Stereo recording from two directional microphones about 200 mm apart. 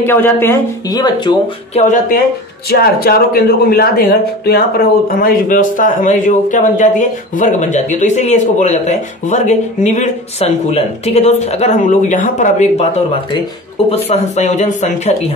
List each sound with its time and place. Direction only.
0.0 s speech: 10° left (ahead or behind)
2.7 s speech: 50° left (ahead or behind)